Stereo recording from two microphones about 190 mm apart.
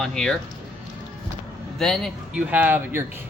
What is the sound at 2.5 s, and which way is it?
Speech, 10° right (ahead or behind).